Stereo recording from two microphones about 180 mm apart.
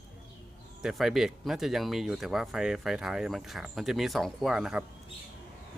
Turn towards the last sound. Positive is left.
turn(degrees=-5)  # may be behind; listen again after turning